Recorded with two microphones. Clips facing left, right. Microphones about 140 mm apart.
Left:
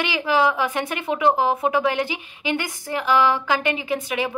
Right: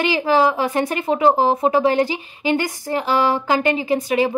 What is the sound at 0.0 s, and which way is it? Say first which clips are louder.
A woman's voice: right 4 dB; 35° right (ahead or behind).